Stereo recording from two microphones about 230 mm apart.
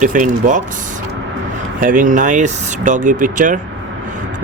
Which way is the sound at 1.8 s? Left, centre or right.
Right.